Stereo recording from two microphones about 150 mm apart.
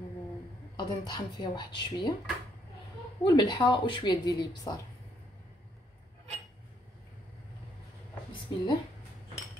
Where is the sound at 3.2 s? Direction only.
30° left (ahead or behind).